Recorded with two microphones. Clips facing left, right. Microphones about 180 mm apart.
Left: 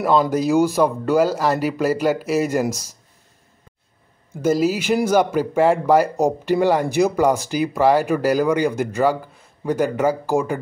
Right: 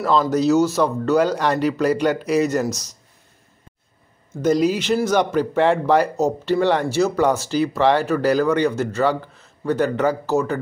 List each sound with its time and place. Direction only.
0.0 s speech: 10° left (ahead or behind)
4.3 s speech: 5° left (ahead or behind)